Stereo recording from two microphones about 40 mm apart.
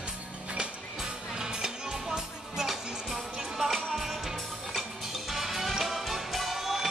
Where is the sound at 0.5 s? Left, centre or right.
Centre.